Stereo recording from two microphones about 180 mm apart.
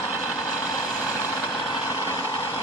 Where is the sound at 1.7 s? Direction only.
15° left (ahead or behind).